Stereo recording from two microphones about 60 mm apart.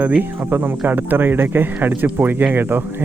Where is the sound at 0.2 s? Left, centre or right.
Right.